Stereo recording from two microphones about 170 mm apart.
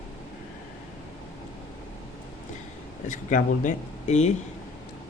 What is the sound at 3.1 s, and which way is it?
Speech, 45° left (ahead or behind).